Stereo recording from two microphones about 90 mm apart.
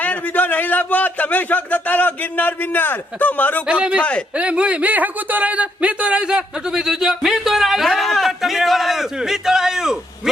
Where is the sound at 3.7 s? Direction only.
15° right (ahead or behind).